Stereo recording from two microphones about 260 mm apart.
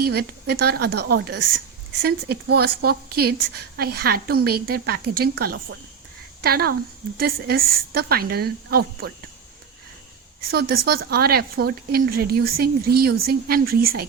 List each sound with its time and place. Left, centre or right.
0.0 s a woman's voice: right
10.5 s a woman's voice: right